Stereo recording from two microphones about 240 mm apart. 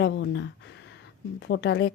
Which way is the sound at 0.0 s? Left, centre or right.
Left.